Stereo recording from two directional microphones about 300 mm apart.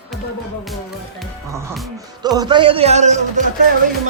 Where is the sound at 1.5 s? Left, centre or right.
Centre; by 3.4 s right.